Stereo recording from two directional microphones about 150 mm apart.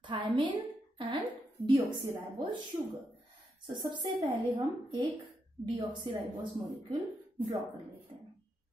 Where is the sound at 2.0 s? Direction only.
30° right (ahead or behind).